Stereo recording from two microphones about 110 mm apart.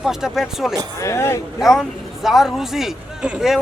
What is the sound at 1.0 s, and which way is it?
Speech, 25° left (ahead or behind).